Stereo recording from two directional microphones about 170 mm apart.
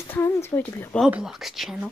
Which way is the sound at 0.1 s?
15° left (ahead or behind).